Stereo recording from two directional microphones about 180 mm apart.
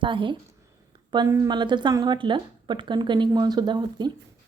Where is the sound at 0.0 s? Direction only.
25° right (ahead or behind).